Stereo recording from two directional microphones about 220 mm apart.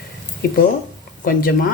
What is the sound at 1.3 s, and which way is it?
Speech, 40° left (ahead or behind).